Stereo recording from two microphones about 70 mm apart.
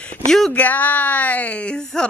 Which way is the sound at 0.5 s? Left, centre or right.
Left.